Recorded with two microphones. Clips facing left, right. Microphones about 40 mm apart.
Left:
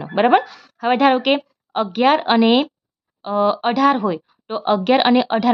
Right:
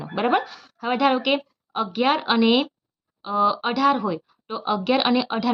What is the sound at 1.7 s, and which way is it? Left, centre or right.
Speech, left.